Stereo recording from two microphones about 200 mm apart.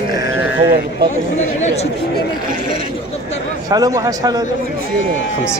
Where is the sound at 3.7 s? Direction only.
20° right (ahead or behind).